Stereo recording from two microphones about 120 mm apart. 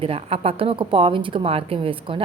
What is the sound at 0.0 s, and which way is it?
A woman's voice, 55° right (ahead or behind).